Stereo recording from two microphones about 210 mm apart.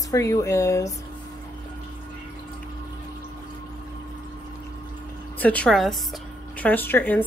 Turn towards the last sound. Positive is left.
turn(degrees=10)  # may be behind; listen again after turning